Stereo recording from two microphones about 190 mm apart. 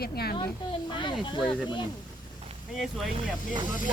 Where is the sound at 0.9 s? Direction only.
25° left (ahead or behind).